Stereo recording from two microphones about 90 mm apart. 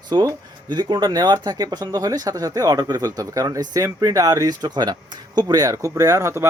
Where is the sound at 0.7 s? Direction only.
55° right (ahead or behind).